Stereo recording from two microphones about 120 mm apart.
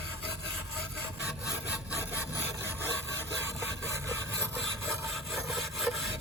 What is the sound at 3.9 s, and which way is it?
Sawing, 25° right (ahead or behind).